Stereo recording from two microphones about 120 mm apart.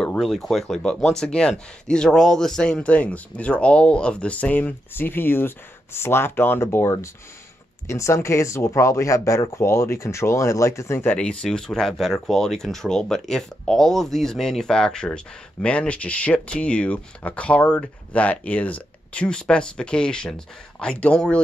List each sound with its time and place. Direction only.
0.0 s speech: 5° left (ahead or behind); by 11.1 s 20° left (ahead or behind)
11.1 s speech: 5° left (ahead or behind)